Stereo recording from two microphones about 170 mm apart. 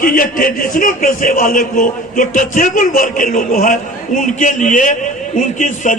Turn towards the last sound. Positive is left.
turn(degrees=50)  # may be behind; listen again after turning